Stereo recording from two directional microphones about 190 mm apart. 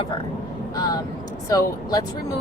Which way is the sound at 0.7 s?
20° left (ahead or behind).